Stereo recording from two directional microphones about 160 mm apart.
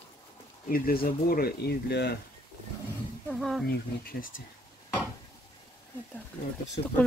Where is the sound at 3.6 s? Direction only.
60° left (ahead or behind).